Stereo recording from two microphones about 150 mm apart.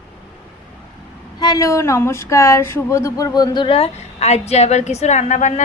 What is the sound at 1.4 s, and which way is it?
Speech, 25° left (ahead or behind).